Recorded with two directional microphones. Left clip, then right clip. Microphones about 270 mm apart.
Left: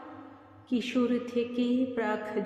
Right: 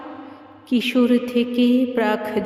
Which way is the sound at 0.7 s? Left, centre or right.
Right.